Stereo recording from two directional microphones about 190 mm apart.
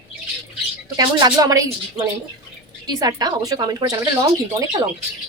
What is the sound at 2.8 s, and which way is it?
Speech, 20° right (ahead or behind).